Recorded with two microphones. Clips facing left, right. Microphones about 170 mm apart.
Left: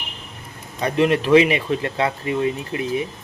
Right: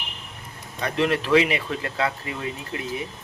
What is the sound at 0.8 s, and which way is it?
Speech, 15° left (ahead or behind).